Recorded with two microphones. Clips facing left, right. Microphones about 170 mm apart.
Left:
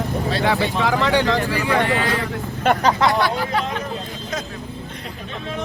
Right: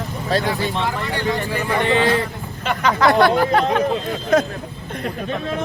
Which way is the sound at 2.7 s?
55° left (ahead or behind).